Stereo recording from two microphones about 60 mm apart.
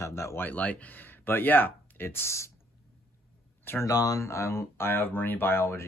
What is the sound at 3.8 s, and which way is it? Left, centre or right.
Speech, left.